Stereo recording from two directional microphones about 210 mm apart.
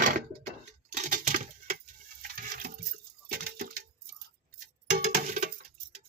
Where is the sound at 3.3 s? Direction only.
45° right (ahead or behind).